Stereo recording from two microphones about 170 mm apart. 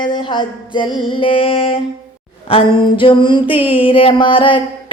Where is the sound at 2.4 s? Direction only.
30° left (ahead or behind).